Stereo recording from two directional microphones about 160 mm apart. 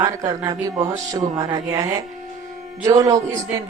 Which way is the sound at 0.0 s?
25° right (ahead or behind).